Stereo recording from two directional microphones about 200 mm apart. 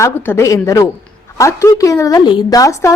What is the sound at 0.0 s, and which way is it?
A woman's voice, 10° left (ahead or behind).